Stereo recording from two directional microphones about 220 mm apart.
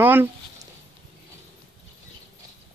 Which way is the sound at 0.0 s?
10° right (ahead or behind).